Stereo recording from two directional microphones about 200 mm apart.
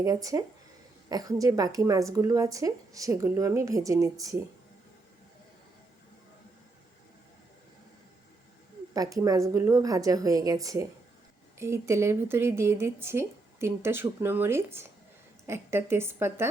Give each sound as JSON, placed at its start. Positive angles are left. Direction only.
{"t": 0.0, "sound": "speech", "side_deg": -15}
{"t": 8.9, "sound": "speech", "side_deg": -15}